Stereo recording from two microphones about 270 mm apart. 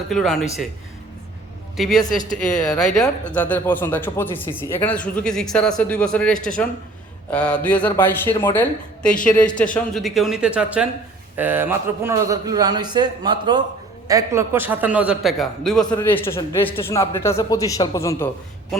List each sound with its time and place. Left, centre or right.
0.1 s a man's voice: centre
1.7 s a man's voice: centre
2.0 s speech: left
2.4 s a man's voice: centre